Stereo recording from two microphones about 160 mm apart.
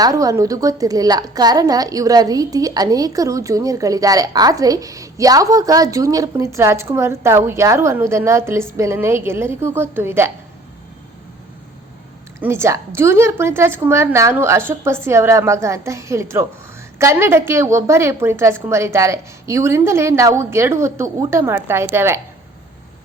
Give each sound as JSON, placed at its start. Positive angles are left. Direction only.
{"t": 0.0, "sound": "a woman's voice", "side_deg": -20}
{"t": 12.4, "sound": "a woman's voice", "side_deg": -15}